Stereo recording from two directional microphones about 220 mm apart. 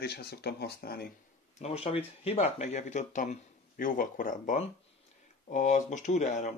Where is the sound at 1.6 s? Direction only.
25° left (ahead or behind).